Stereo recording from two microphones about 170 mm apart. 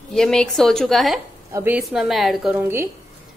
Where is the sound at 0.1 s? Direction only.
5° left (ahead or behind).